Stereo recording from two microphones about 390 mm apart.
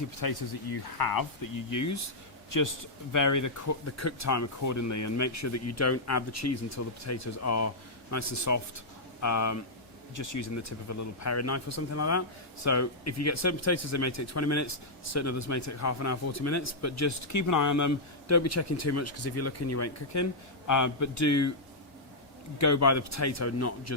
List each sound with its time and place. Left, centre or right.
0.2 s speech: left
22.5 s speech: left